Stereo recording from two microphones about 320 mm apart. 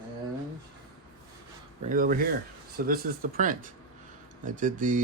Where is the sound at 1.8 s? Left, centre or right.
Right.